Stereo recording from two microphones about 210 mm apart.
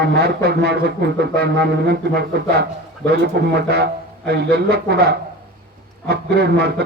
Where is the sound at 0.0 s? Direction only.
50° right (ahead or behind).